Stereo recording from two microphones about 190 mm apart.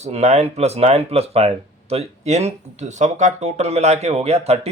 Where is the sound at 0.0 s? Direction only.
35° right (ahead or behind).